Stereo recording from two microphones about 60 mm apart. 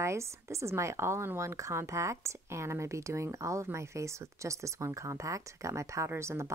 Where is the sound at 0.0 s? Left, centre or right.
Right.